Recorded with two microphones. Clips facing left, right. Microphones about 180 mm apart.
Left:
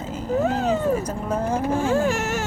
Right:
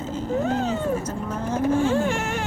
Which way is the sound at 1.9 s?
40° left (ahead or behind).